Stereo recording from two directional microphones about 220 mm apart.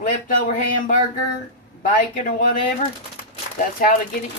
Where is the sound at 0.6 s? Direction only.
35° left (ahead or behind).